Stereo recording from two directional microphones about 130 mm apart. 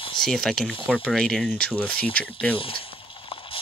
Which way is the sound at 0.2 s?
5° left (ahead or behind).